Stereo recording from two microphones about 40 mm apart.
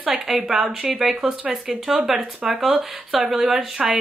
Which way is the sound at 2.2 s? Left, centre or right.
Right.